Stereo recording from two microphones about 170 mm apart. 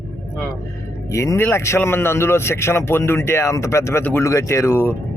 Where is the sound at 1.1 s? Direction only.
15° left (ahead or behind).